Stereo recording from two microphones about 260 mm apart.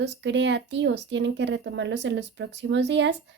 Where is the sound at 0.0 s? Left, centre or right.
Right.